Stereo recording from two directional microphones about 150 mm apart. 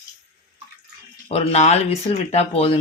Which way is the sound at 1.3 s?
45° left (ahead or behind).